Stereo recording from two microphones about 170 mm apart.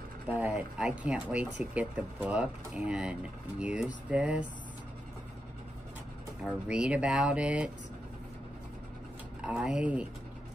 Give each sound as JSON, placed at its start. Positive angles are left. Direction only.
{"t": 0.3, "sound": "speech", "side_deg": -5}
{"t": 6.4, "sound": "speech", "side_deg": -5}
{"t": 9.4, "sound": "speech", "side_deg": -5}